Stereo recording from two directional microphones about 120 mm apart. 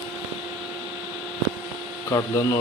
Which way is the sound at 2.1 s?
30° left (ahead or behind).